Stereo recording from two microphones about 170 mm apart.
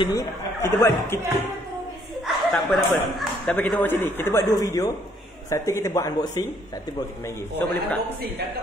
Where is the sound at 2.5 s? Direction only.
Centre (ahead or behind); by 6.5 s 20° left (ahead or behind).